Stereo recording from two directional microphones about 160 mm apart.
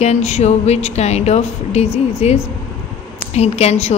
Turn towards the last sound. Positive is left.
turn(degrees=40)  # may be behind; listen again after turning